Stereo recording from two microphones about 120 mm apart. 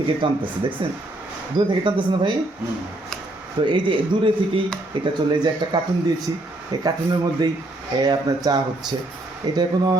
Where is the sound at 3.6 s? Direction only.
45° right (ahead or behind).